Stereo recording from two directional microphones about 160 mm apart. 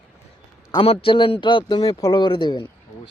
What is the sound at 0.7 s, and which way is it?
A man's voice, 35° left (ahead or behind).